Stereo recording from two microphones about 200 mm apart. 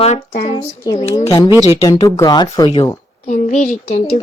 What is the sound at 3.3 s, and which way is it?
Speech, 40° left (ahead or behind).